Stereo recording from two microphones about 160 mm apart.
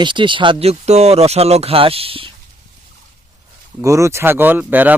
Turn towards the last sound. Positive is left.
turn(degrees=-10)  # may be behind; listen again after turning